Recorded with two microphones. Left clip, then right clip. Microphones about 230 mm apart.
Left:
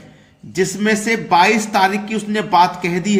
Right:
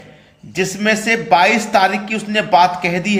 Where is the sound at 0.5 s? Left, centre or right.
Centre.